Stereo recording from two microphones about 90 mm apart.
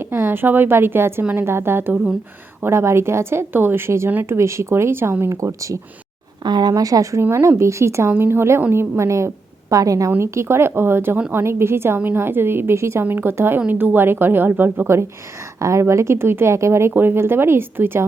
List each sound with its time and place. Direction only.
0.1 s a woman's voice: 25° right (ahead or behind)
6.4 s a woman's voice: 50° right (ahead or behind); by 18.0 s 25° right (ahead or behind)